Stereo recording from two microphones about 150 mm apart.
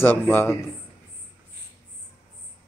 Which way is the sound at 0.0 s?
15° left (ahead or behind).